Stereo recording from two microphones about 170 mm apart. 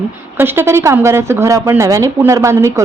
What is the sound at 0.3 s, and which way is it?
A woman's voice, 15° right (ahead or behind).